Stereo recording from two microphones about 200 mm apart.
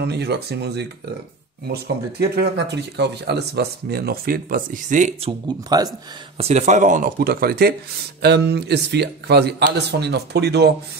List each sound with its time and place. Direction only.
0.0 s a man's voice: 55° right (ahead or behind); by 5.3 s 40° right (ahead or behind)
5.7 s speech: 20° right (ahead or behind)
6.3 s a man's voice: 30° right (ahead or behind); by 10.7 s 55° right (ahead or behind)